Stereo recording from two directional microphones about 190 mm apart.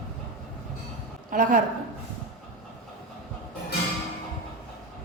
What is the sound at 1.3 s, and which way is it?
Speech, 45° right (ahead or behind).